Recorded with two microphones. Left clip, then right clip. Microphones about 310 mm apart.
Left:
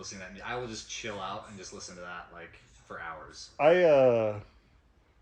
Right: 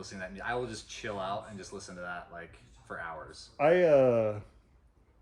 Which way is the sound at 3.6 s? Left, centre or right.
Centre.